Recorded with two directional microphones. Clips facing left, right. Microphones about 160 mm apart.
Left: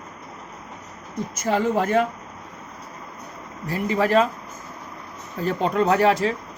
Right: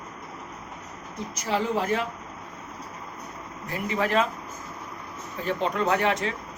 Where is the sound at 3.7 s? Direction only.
35° left (ahead or behind).